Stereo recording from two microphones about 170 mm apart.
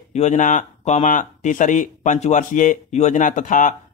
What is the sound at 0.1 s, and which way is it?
Speech, 45° left (ahead or behind).